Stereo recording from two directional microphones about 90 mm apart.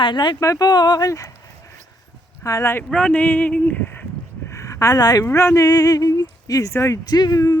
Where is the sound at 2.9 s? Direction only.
15° left (ahead or behind); by 5.2 s 45° left (ahead or behind).